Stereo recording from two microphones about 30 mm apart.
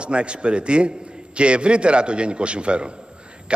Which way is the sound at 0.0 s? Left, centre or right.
Right.